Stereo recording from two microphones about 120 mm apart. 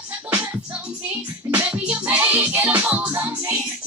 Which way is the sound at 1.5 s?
10° right (ahead or behind).